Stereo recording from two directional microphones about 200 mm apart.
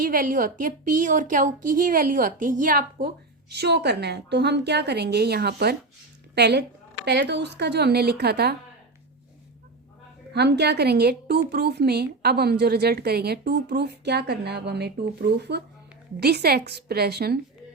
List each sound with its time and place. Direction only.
0.0 s a woman's voice: 45° right (ahead or behind)
3.5 s a woman's voice: 55° right (ahead or behind)
10.3 s a woman's voice: 55° right (ahead or behind)